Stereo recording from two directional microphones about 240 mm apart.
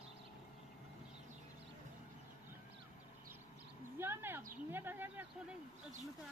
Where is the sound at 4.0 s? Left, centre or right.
Centre.